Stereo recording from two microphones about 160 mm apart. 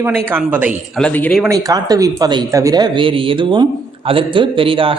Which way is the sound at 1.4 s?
20° right (ahead or behind).